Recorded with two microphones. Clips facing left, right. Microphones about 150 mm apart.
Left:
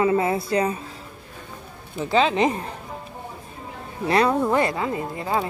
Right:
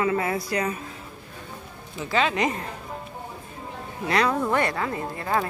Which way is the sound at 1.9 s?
30° left (ahead or behind).